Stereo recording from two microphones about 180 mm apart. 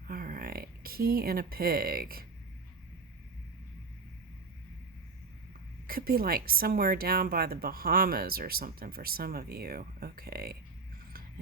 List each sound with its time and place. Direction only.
0.1 s speech: 50° right (ahead or behind)
5.9 s a woman's voice: 55° right (ahead or behind)